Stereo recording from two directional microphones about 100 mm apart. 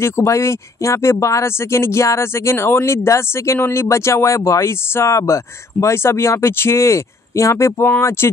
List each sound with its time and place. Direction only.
0.0 s speech: 30° left (ahead or behind)